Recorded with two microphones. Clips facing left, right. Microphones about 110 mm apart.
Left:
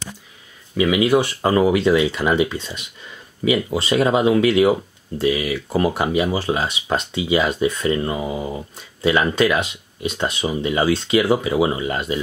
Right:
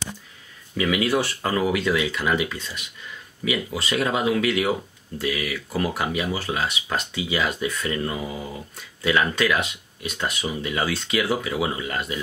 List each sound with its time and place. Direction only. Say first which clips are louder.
0.7 s speech: left 6 dB; 20° left (ahead or behind)